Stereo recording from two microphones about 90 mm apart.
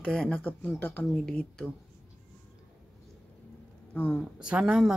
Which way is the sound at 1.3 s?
5° left (ahead or behind).